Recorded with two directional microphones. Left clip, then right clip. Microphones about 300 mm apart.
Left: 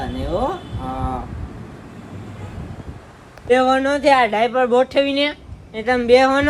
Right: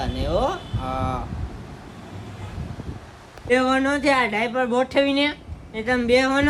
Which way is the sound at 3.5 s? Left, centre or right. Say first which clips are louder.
Left 4 dB; centre.